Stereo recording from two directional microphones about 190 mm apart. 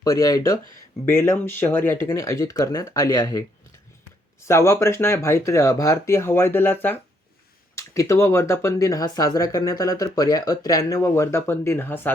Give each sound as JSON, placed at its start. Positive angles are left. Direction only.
{"t": 0.0, "sound": "speech", "side_deg": 20}
{"t": 4.4, "sound": "speech", "side_deg": 15}